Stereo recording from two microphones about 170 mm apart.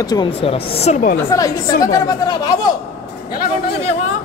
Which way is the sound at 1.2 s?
20° left (ahead or behind).